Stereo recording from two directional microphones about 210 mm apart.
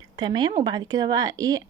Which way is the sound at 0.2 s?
20° right (ahead or behind).